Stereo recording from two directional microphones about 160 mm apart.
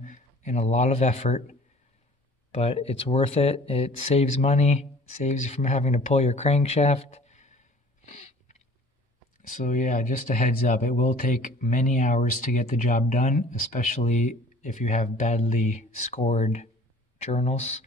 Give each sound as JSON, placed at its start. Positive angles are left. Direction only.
{"t": 0.0, "sound": "speech", "side_deg": 50}